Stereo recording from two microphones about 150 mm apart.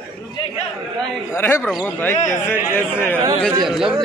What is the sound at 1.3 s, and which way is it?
A man's voice, 15° left (ahead or behind).